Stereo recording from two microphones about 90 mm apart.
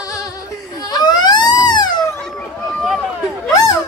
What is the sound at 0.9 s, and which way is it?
Baby cry, 50° left (ahead or behind).